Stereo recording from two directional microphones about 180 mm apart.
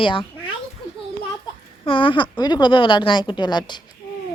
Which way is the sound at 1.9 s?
30° left (ahead or behind).